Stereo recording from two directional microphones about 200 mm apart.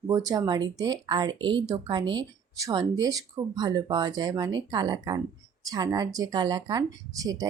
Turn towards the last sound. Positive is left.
turn(degrees=-20)  # may be behind; listen again after turning